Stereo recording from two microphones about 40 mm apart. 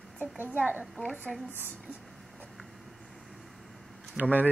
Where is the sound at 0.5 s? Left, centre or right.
Right.